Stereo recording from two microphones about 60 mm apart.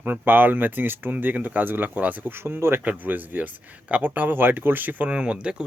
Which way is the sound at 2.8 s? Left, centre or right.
Right.